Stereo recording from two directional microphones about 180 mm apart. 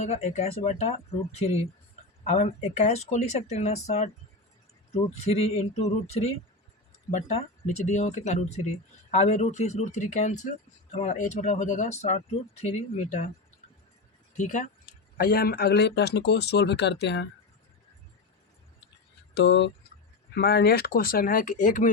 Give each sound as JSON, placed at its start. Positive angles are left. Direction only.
{"t": 0.0, "sound": "speech", "side_deg": 35}
{"t": 14.3, "sound": "speech", "side_deg": 45}
{"t": 15.2, "sound": "speech", "side_deg": 55}
{"t": 19.3, "sound": "speech", "side_deg": 75}
{"t": 20.3, "sound": "speech", "side_deg": 60}